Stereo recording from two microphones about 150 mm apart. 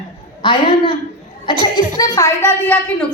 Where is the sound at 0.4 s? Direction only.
30° left (ahead or behind).